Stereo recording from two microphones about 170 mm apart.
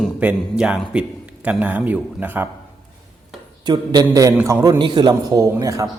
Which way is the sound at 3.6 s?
25° right (ahead or behind).